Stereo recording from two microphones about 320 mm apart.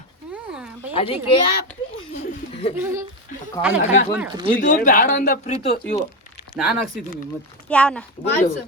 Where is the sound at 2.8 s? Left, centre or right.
Centre.